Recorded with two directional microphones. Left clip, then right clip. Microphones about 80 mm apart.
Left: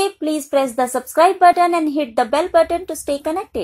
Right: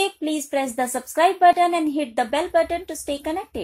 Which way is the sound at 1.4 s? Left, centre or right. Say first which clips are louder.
Left 3 dB; centre.